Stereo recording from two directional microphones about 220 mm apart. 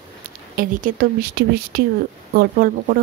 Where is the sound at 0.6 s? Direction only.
40° right (ahead or behind).